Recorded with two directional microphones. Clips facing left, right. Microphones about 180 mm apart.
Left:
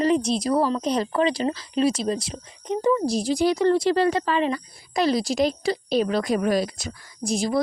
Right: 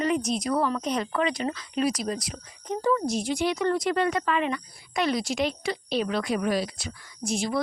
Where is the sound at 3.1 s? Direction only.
35° left (ahead or behind).